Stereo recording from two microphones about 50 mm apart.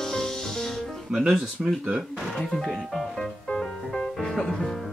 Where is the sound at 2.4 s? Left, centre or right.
Centre.